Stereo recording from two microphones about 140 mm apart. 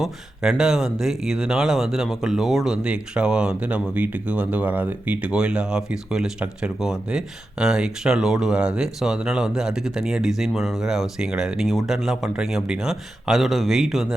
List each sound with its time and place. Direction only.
0.0 s speech: 5° right (ahead or behind)